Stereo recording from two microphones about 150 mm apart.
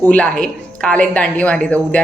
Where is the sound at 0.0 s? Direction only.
10° left (ahead or behind).